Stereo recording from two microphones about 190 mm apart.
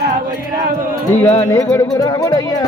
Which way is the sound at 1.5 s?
20° left (ahead or behind).